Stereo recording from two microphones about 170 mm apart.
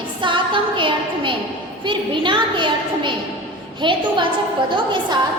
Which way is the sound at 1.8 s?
30° right (ahead or behind).